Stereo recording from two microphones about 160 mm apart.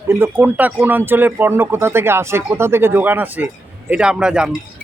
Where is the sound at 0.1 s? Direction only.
15° right (ahead or behind).